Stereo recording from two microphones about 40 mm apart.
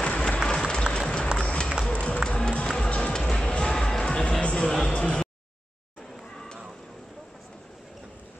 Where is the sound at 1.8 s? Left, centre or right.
Left.